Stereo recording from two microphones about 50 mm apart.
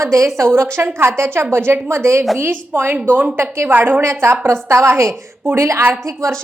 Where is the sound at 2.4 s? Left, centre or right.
Right.